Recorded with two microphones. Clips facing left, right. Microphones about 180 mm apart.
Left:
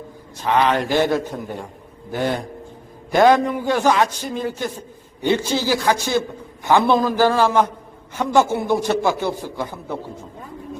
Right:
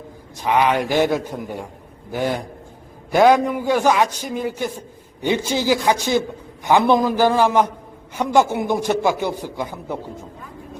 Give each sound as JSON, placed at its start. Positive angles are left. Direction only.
{"t": 0.4, "sound": "a man's voice", "side_deg": -10}